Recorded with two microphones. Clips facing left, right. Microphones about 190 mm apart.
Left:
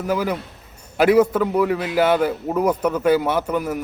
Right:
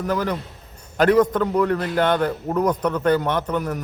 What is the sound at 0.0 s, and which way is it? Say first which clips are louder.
A man's voice: left 1 dB; 10° left (ahead or behind).